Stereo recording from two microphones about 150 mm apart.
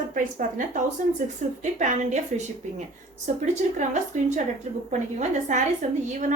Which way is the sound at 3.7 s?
55° right (ahead or behind).